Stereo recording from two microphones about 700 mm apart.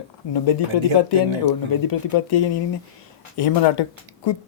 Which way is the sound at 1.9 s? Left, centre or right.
Left.